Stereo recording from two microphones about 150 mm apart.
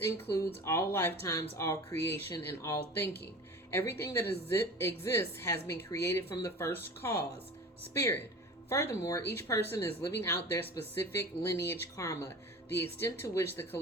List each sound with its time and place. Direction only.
0.6 s speech: 20° left (ahead or behind)
8.7 s speech: 20° left (ahead or behind)